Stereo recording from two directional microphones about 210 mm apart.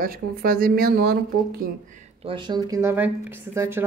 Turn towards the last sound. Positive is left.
turn(degrees=-10)  # may be behind; listen again after turning